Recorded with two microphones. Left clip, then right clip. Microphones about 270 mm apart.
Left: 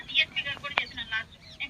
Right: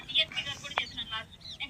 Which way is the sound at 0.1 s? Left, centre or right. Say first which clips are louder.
Left 3 dB; centre.